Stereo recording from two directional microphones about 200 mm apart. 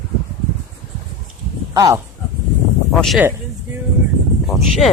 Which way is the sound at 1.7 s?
20° right (ahead or behind).